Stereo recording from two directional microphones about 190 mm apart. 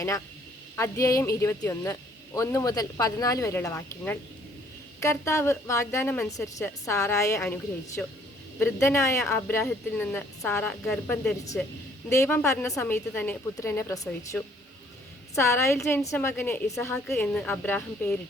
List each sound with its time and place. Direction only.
0.8 s a woman's voice: 20° left (ahead or behind)